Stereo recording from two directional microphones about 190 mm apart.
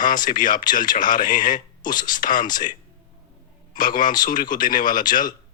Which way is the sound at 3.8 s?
45° left (ahead or behind).